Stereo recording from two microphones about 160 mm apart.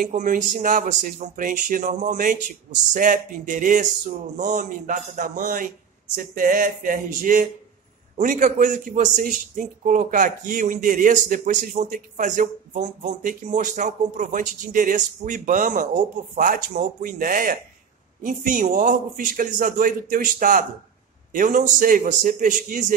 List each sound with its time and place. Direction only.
0.0 s a man's voice: 55° right (ahead or behind)